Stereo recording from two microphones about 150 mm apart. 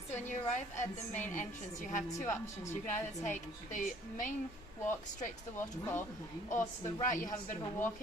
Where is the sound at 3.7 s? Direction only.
60° left (ahead or behind).